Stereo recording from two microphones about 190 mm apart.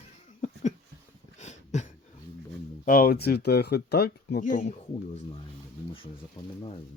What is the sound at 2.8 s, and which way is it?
Speech, 50° left (ahead or behind).